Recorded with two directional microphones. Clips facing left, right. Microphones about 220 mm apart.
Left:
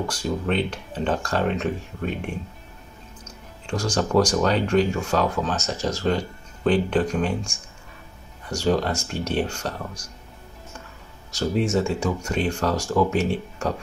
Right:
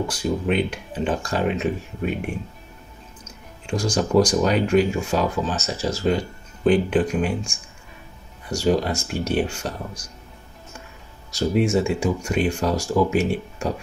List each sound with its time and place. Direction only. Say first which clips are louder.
0.1 s speech: right 2 dB; 10° right (ahead or behind)
3.6 s speech: right 2 dB; 10° right (ahead or behind)
8.5 s speech: right 2 dB; 10° right (ahead or behind)
11.3 s speech: right 2 dB; 10° right (ahead or behind)